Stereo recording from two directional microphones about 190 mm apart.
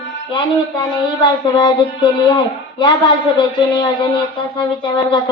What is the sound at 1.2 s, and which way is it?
Speech, 20° left (ahead or behind).